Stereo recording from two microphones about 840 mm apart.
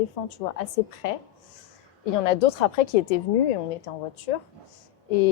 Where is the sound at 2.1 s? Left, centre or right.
Left.